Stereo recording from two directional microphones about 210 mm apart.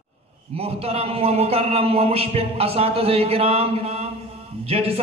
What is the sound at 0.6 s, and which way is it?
A man's voice, 30° right (ahead or behind).